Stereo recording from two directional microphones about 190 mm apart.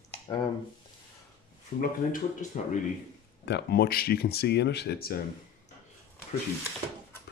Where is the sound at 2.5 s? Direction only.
40° left (ahead or behind).